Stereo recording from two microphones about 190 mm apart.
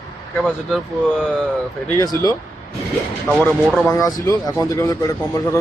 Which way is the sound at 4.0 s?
20° left (ahead or behind).